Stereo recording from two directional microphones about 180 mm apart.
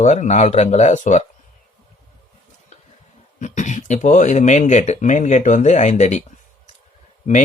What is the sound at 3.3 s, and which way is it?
Speech, 45° left (ahead or behind).